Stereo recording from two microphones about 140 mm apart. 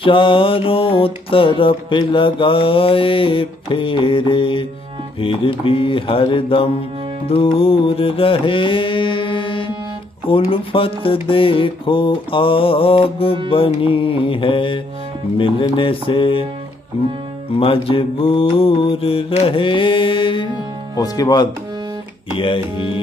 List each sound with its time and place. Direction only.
0.0 s music: 35° left (ahead or behind)
17.6 s music: 40° left (ahead or behind)
20.9 s speech: 25° left (ahead or behind)
22.3 s music: 40° left (ahead or behind)